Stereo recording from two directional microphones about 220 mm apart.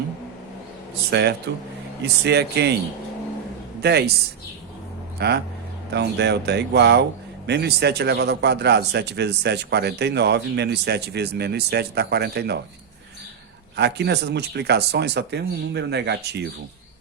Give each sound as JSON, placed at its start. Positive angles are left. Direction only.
{"t": 1.1, "sound": "a man's voice", "side_deg": -50}
{"t": 3.8, "sound": "a man's voice", "side_deg": -50}
{"t": 5.2, "sound": "a man's voice", "side_deg": -45}
{"t": 13.7, "sound": "a man's voice", "side_deg": -50}